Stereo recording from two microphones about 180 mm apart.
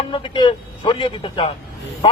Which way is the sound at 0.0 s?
30° left (ahead or behind).